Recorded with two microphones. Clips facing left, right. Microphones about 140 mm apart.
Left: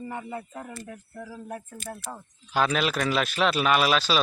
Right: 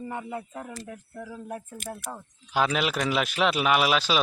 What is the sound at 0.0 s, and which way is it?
Speech, 15° right (ahead or behind).